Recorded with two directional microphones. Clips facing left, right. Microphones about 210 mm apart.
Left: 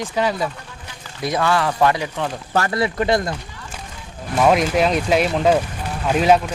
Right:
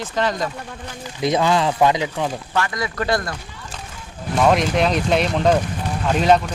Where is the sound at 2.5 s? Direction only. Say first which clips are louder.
Left 6 dB; 35° left (ahead or behind).